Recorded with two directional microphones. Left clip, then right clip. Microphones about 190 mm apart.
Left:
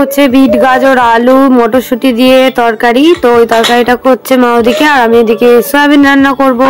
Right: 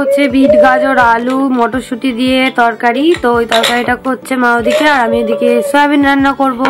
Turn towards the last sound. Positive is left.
turn(degrees=10)  # may be behind; listen again after turning